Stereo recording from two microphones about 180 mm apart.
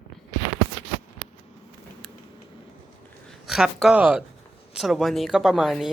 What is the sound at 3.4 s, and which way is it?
Speech, centre (ahead or behind).